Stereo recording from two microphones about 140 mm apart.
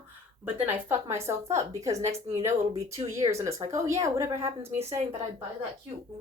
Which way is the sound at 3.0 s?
20° right (ahead or behind).